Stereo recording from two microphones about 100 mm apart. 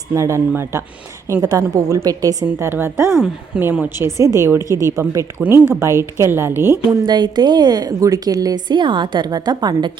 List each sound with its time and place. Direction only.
0.1 s a woman's voice: 30° right (ahead or behind)
7.0 s a woman's voice: 45° right (ahead or behind)